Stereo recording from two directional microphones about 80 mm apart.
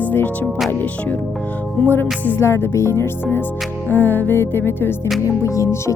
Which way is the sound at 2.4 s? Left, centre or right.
Left.